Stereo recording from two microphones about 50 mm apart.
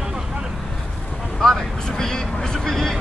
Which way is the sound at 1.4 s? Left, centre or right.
Centre.